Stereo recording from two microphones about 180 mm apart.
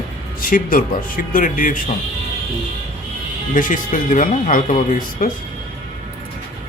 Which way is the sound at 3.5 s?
50° left (ahead or behind).